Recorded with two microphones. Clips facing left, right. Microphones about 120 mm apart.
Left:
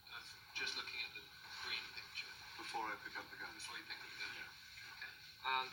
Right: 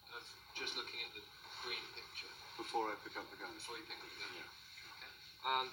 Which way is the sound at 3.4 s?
25° right (ahead or behind).